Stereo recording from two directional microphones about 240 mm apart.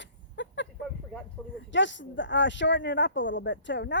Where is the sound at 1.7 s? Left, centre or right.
Left.